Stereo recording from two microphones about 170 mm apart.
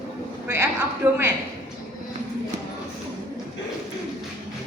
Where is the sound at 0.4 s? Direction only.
15° right (ahead or behind).